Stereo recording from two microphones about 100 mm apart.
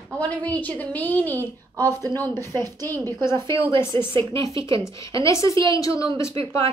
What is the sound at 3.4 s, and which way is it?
Speech, 30° left (ahead or behind).